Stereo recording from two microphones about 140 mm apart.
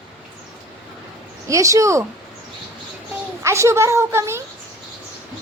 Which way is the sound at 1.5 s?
25° right (ahead or behind).